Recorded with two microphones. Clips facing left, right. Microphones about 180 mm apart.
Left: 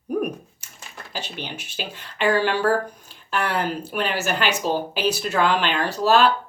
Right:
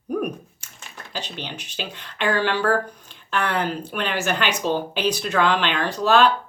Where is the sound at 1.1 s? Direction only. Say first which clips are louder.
Even; 10° left (ahead or behind).